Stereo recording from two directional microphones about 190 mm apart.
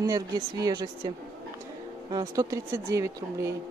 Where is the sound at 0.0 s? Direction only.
20° right (ahead or behind).